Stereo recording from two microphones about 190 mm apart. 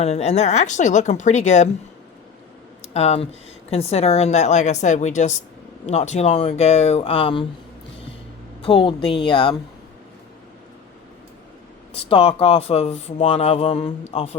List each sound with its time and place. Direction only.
0.0 s speech: 35° left (ahead or behind)
2.9 s speech: 35° left (ahead or behind)
8.6 s a woman's voice: 25° left (ahead or behind)
12.0 s speech: 30° left (ahead or behind)